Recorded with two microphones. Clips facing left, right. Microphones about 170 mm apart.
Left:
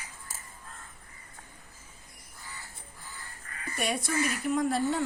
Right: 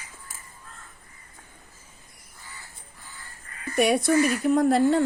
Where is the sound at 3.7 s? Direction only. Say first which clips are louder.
Right 11 dB; 70° right (ahead or behind).